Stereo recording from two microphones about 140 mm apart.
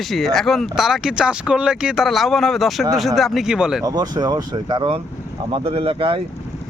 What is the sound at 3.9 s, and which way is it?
Speech, 30° right (ahead or behind).